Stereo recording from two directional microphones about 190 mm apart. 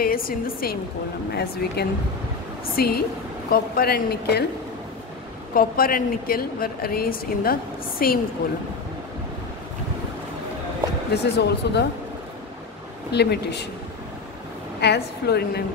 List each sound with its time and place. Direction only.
0.0 s speech: 50° left (ahead or behind)
5.5 s speech: 50° left (ahead or behind)
11.3 s speech: 65° left (ahead or behind)
13.1 s speech: 60° left (ahead or behind)
14.8 s speech: 60° left (ahead or behind)